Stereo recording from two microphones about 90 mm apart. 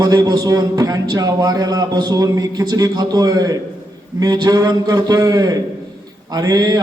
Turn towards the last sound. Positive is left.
turn(degrees=-45)  # may be behind; listen again after turning